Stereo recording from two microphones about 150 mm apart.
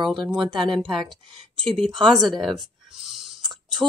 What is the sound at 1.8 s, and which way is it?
Speech, 30° right (ahead or behind).